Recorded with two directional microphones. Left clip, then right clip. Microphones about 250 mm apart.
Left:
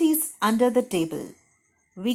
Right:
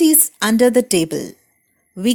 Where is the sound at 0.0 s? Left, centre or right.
Right.